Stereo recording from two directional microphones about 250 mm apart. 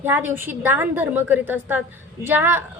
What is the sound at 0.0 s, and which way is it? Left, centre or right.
A woman's voice, centre.